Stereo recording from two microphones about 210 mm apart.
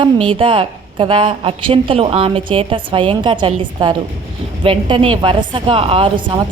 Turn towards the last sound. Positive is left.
turn(degrees=-25)  # may be behind; listen again after turning